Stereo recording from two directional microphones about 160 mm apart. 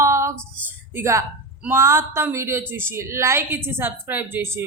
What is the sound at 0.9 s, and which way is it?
A woman's voice, 15° right (ahead or behind).